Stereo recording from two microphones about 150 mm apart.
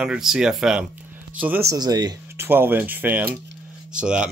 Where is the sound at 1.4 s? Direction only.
15° right (ahead or behind).